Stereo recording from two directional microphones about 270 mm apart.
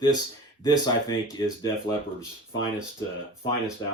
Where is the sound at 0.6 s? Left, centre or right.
Centre.